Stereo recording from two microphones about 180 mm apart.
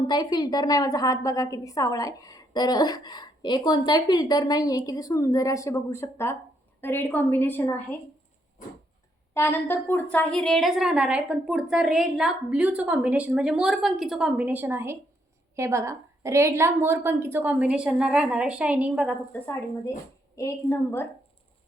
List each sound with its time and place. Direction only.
0.1 s a woman's voice: 20° left (ahead or behind)
9.3 s a woman's voice: 10° left (ahead or behind); by 19.1 s 5° right (ahead or behind)
19.3 s a woman's voice: 10° left (ahead or behind)